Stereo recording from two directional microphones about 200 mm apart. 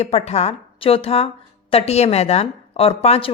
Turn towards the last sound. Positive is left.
turn(degrees=30)  # may be behind; listen again after turning